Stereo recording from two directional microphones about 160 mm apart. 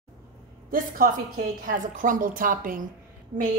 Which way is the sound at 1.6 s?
55° right (ahead or behind).